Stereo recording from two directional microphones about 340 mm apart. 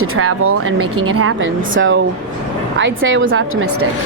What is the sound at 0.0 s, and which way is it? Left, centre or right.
A woman's voice, right.